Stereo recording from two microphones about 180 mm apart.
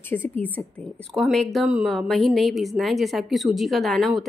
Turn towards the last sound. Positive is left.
turn(degrees=0)  # may be behind; listen again after turning